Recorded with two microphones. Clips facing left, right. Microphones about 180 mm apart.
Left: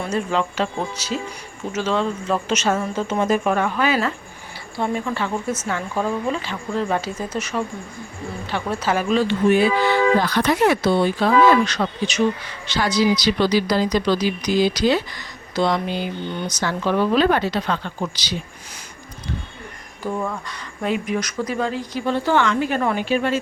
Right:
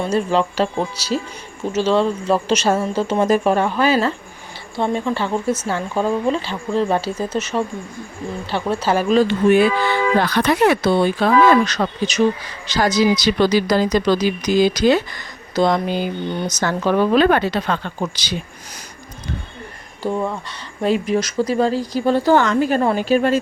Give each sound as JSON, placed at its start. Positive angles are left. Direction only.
{"t": 0.0, "sound": "speech", "side_deg": -30}
{"t": 10.2, "sound": "speech", "side_deg": -65}
{"t": 11.6, "sound": "a woman's voice", "side_deg": -40}
{"t": 20.0, "sound": "speech", "side_deg": -30}